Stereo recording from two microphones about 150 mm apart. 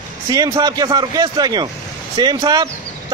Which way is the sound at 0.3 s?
25° right (ahead or behind).